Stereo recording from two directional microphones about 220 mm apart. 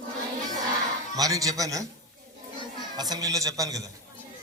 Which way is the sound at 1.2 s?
15° right (ahead or behind).